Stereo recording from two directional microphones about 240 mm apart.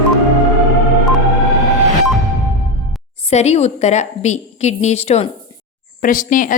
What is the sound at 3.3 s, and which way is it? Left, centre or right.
A woman's voice, left.